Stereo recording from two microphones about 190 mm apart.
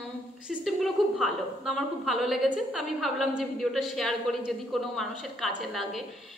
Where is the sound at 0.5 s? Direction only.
Centre (ahead or behind).